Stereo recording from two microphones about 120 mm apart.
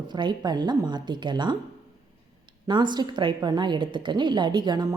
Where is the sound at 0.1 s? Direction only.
40° right (ahead or behind).